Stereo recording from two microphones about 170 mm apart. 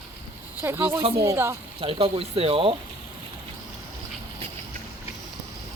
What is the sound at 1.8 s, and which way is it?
Speech, 35° right (ahead or behind).